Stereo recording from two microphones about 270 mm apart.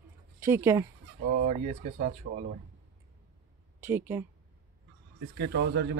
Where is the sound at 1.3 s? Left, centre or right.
Right.